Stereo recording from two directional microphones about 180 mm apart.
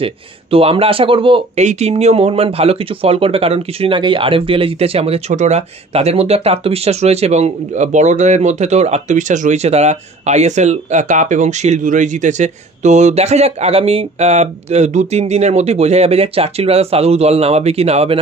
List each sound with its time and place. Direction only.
0.0 s speech: 30° right (ahead or behind)